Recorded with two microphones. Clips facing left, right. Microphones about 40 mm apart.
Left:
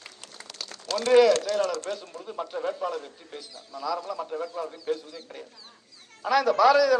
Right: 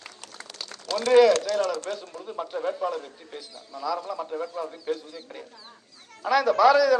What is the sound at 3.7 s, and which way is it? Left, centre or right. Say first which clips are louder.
Speech: right 1 dB; right.